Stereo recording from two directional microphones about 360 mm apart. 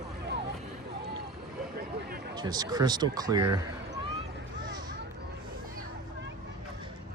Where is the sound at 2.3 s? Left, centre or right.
Centre.